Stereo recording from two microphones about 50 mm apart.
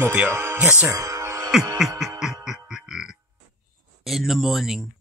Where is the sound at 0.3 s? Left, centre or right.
Right.